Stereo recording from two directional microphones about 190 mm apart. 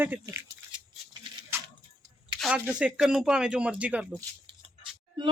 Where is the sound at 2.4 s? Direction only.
5° right (ahead or behind).